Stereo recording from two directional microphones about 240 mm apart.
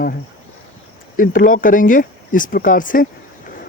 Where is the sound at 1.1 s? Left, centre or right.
Left.